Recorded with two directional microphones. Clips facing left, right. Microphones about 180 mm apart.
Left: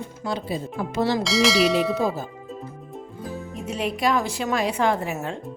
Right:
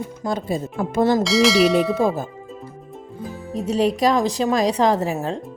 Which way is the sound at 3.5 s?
35° right (ahead or behind).